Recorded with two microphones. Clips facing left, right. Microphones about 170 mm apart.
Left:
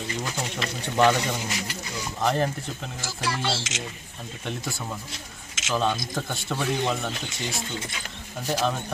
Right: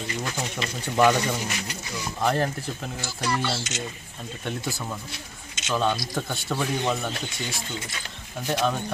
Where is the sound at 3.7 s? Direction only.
90° left.